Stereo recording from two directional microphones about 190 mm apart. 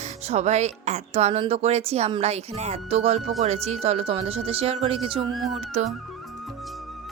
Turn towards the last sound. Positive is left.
turn(degrees=-35)  # may be behind; listen again after turning